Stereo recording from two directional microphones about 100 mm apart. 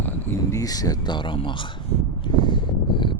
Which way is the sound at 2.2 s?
55° left (ahead or behind).